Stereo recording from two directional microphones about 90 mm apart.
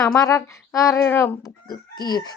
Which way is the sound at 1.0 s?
25° left (ahead or behind).